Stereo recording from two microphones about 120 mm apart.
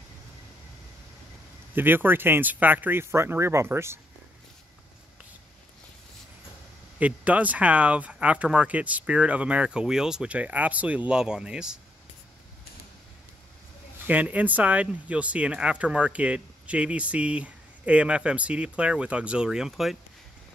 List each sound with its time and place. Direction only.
1.8 s speech: 15° right (ahead or behind)
7.0 s speech: 10° right (ahead or behind)
13.9 s speech: 15° right (ahead or behind)